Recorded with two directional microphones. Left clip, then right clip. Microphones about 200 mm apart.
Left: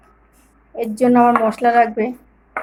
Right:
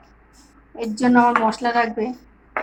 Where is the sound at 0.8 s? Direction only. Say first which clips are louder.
Left 3 dB; 60° left (ahead or behind).